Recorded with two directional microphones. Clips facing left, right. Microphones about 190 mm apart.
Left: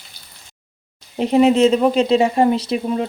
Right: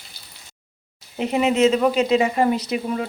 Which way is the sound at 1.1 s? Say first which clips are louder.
Left 6 dB; 35° left (ahead or behind).